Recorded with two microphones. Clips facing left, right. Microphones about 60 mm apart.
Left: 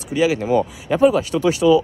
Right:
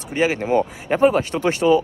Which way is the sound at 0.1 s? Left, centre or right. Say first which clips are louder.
Left 1 dB; right.